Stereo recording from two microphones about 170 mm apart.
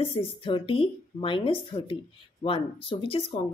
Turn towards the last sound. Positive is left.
turn(degrees=30)  # may be behind; listen again after turning